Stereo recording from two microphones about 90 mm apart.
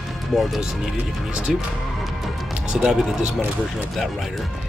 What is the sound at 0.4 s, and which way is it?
Speech, 5° right (ahead or behind).